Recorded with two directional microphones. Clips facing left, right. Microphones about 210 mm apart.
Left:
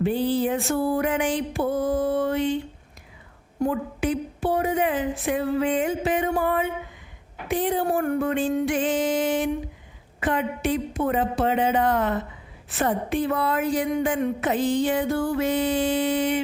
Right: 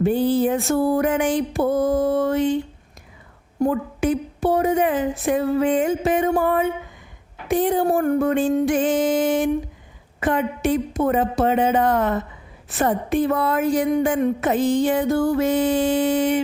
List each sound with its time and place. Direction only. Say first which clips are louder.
0.0 s a woman's voice: right 4 dB; 45° right (ahead or behind)
3.6 s a woman's voice: right 4 dB; 45° right (ahead or behind)